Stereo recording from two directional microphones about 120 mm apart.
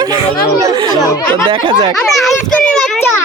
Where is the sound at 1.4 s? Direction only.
45° right (ahead or behind).